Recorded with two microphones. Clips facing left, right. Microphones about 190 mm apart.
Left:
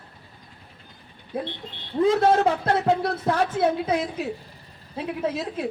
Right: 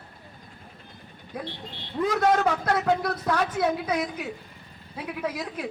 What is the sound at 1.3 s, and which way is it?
A woman's voice, 30° left (ahead or behind).